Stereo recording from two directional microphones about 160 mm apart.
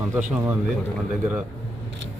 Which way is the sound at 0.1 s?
15° right (ahead or behind).